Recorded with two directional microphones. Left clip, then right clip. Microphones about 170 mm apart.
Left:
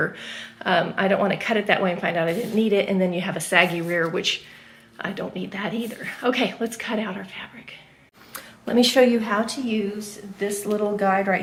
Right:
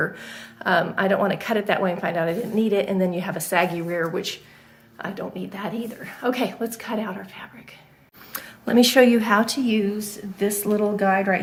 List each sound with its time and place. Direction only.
0.0 s speech: 5° left (ahead or behind)
8.3 s speech: 40° right (ahead or behind)
10.9 s speech: 25° right (ahead or behind)